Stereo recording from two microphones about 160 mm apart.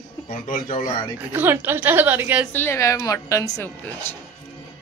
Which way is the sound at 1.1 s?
10° right (ahead or behind).